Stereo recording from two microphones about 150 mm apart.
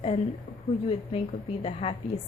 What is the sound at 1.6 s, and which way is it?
Speech, 40° left (ahead or behind).